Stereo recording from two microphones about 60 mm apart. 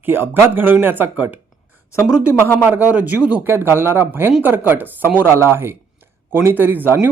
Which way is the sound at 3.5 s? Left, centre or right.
Right.